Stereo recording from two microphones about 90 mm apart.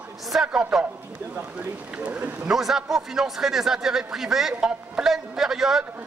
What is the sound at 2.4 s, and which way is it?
A man's voice, 5° right (ahead or behind).